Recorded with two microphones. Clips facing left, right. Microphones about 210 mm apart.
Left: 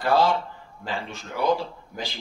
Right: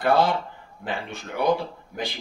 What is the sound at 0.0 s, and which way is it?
Speech, 55° right (ahead or behind).